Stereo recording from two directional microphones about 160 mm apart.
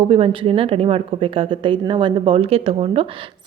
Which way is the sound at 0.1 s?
35° right (ahead or behind).